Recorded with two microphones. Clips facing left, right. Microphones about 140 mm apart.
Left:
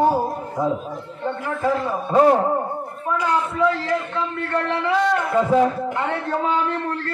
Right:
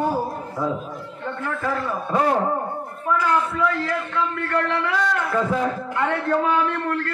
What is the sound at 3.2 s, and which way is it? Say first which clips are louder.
A man's voice: left 1 dB; 25° left (ahead or behind).